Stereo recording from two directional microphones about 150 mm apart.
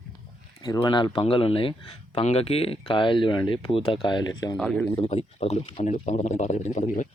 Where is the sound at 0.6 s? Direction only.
30° left (ahead or behind).